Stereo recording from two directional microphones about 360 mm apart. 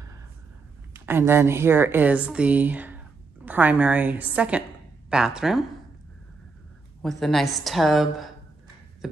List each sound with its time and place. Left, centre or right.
0.9 s speech: centre
7.0 s speech: centre